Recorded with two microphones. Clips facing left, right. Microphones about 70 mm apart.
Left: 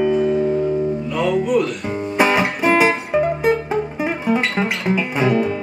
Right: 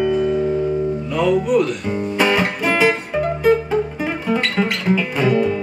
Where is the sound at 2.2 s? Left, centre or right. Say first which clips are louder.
Left 2 dB; centre.